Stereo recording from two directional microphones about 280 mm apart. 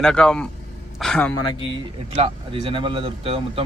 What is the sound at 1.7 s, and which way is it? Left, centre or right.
Speech, right.